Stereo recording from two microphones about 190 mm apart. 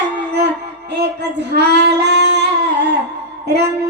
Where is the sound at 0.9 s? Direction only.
60° right (ahead or behind).